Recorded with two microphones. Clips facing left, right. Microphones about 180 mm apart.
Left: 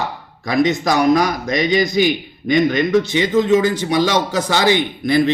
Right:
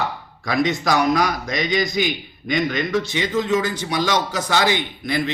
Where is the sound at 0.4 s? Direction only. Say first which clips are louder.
Left 4 dB; 20° left (ahead or behind).